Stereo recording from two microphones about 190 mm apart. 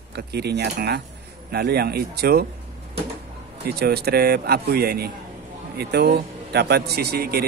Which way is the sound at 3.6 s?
55° right (ahead or behind).